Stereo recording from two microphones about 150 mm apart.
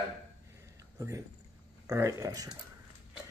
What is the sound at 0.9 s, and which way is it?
A man's voice, 20° right (ahead or behind).